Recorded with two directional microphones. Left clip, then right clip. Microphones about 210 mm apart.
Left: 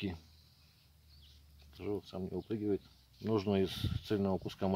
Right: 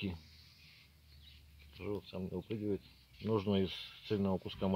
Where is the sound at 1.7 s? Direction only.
25° left (ahead or behind).